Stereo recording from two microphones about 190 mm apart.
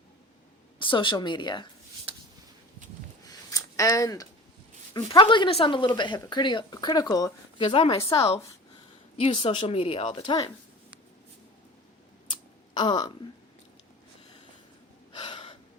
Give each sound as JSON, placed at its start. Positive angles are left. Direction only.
{"t": 0.8, "sound": "speech", "side_deg": 25}
{"t": 2.1, "sound": "a sound", "side_deg": -30}
{"t": 3.2, "sound": "a sound", "side_deg": 20}
{"t": 4.9, "sound": "speech", "side_deg": 25}
{"t": 8.1, "sound": "speech", "side_deg": 15}
{"t": 9.1, "sound": "speech", "side_deg": 30}
{"t": 12.7, "sound": "speech", "side_deg": 25}
{"t": 15.1, "sound": "gasp", "side_deg": 25}